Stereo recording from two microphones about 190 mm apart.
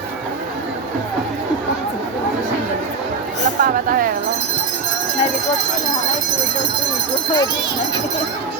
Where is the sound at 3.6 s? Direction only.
50° right (ahead or behind).